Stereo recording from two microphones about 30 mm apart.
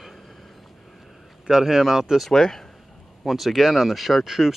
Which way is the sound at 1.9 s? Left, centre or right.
Centre.